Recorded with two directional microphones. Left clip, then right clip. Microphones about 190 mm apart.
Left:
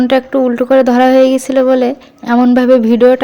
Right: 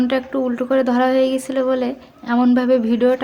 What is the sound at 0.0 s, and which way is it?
A woman's voice, 35° left (ahead or behind).